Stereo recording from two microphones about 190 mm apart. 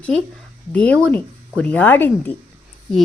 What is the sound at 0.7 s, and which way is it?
A woman's voice, 5° left (ahead or behind).